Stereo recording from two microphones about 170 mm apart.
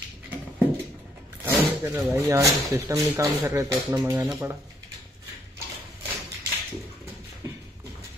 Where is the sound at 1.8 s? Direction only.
15° right (ahead or behind).